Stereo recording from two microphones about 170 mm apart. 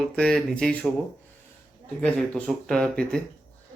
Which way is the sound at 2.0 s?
5° left (ahead or behind).